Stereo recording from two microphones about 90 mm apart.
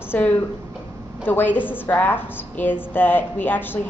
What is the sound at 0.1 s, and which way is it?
A woman's voice, 20° left (ahead or behind).